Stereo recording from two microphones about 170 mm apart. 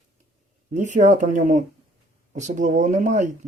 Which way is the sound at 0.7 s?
45° right (ahead or behind).